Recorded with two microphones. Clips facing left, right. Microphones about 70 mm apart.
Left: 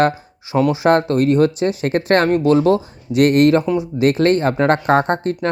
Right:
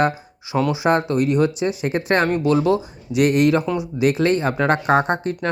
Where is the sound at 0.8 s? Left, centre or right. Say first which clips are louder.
Left 4 dB; left.